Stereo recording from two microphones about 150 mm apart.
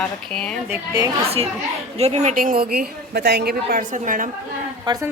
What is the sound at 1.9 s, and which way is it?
A woman's voice, 45° right (ahead or behind).